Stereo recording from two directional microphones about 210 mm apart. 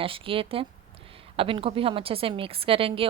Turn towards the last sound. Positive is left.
turn(degrees=-25)  # may be behind; listen again after turning